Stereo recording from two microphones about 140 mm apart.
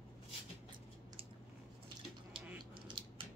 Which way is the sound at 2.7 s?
35° right (ahead or behind).